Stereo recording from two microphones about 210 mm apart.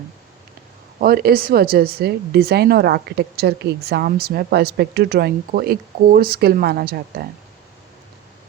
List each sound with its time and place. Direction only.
0.9 s speech: 45° right (ahead or behind)